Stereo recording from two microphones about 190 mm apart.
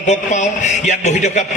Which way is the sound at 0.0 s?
40° left (ahead or behind).